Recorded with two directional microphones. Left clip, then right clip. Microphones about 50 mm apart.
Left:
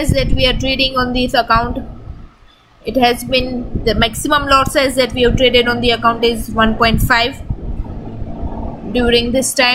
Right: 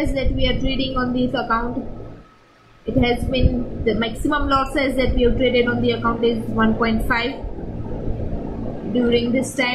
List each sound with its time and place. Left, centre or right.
0.0 s a woman's voice: left
3.0 s a woman's voice: left
8.9 s a woman's voice: left